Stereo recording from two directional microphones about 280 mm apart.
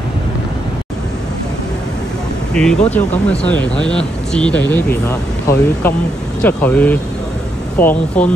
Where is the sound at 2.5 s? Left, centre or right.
Centre.